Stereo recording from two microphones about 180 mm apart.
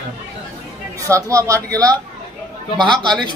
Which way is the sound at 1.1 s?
15° right (ahead or behind).